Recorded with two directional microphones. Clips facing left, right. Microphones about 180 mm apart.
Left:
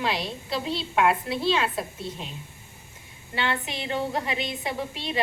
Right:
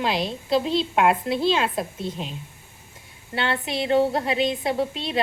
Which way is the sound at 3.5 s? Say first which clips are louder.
Right 8 dB; 35° right (ahead or behind).